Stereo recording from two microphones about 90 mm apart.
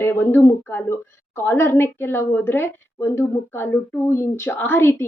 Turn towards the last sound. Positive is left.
turn(degrees=25)  # may be behind; listen again after turning